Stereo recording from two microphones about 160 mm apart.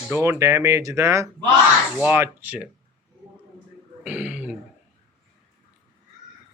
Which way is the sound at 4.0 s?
10° right (ahead or behind).